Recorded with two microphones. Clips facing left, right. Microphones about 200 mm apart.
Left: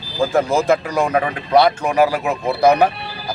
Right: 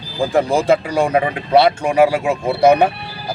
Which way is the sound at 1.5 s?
30° right (ahead or behind).